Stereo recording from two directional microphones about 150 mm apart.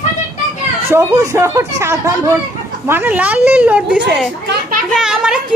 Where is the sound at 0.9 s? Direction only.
15° right (ahead or behind).